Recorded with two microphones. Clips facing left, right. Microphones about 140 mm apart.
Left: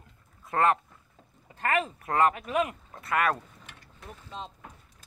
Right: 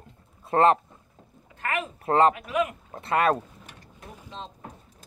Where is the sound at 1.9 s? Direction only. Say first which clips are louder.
Right 8 dB; 30° right (ahead or behind).